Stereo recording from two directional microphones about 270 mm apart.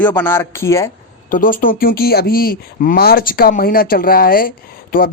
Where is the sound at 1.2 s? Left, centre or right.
Left.